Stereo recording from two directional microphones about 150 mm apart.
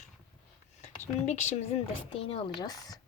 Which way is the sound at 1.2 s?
50° left (ahead or behind).